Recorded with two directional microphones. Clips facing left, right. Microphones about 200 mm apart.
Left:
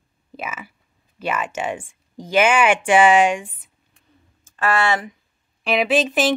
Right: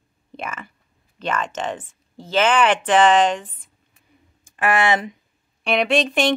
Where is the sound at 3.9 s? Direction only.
15° right (ahead or behind).